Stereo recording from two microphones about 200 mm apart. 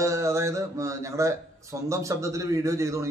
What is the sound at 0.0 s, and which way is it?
Speech, 15° right (ahead or behind).